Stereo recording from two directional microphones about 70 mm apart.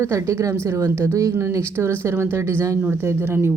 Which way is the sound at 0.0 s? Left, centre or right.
Right.